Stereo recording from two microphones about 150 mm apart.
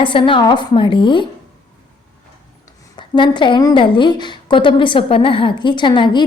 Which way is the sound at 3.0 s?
30° left (ahead or behind).